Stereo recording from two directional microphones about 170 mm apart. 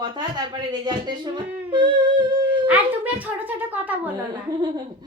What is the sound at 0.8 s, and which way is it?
Singing, 25° right (ahead or behind).